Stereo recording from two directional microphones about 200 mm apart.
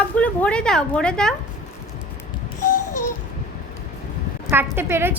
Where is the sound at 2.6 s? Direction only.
40° left (ahead or behind).